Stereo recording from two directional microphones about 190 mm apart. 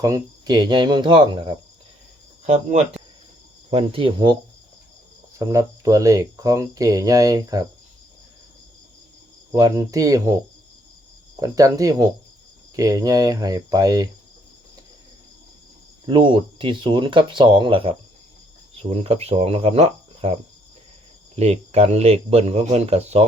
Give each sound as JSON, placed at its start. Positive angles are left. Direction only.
{"t": 0.0, "sound": "speech", "side_deg": -20}
{"t": 3.7, "sound": "speech", "side_deg": -30}
{"t": 5.4, "sound": "speech", "side_deg": -15}
{"t": 9.5, "sound": "speech", "side_deg": -20}
{"t": 11.3, "sound": "speech", "side_deg": -20}
{"t": 16.0, "sound": "speech", "side_deg": -25}